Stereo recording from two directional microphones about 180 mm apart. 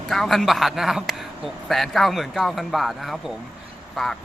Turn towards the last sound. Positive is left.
turn(degrees=0)  # may be behind; listen again after turning